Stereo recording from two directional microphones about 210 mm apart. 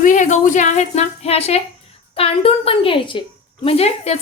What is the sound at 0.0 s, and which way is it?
A woman's voice, 35° left (ahead or behind).